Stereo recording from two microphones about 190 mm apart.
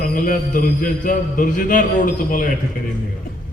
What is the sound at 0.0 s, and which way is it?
A man's voice, 45° left (ahead or behind).